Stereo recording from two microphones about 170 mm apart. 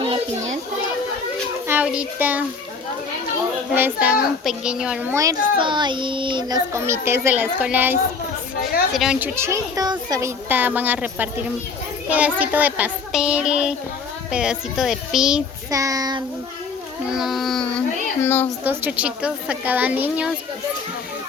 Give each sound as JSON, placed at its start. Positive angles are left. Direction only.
{"t": 1.6, "sound": "a child's voice", "side_deg": -10}
{"t": 3.7, "sound": "a child's voice", "side_deg": -10}
{"t": 6.7, "sound": "a woman's voice", "side_deg": -15}
{"t": 15.7, "sound": "a child's voice", "side_deg": -20}
{"t": 17.1, "sound": "a child's voice", "side_deg": 0}
{"t": 18.6, "sound": "a woman's voice", "side_deg": -10}